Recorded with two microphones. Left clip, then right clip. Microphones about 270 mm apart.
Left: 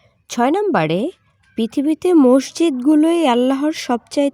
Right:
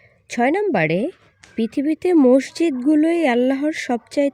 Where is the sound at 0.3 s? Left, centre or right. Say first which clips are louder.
Left 2 dB; centre.